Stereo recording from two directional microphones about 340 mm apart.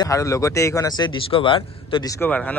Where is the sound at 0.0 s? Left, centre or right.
Centre.